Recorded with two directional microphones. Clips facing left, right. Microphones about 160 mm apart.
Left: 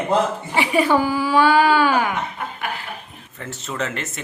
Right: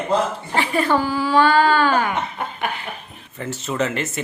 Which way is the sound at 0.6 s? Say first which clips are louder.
Left 2 dB; 10° left (ahead or behind).